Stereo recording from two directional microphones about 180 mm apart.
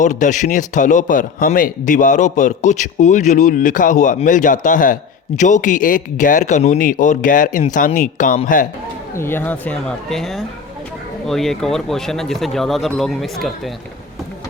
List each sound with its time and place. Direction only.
0.0 s a man's voice: 45° left (ahead or behind)
9.1 s speech: 10° left (ahead or behind)